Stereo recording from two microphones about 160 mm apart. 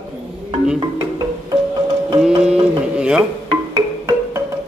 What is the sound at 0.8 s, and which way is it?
Music, 30° right (ahead or behind).